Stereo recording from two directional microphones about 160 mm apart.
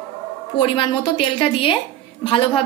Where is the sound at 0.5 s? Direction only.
30° left (ahead or behind).